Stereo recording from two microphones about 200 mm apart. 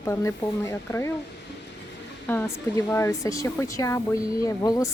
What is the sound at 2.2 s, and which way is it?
Speech, 10° left (ahead or behind).